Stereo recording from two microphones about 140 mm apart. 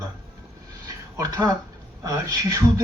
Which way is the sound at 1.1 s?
25° right (ahead or behind).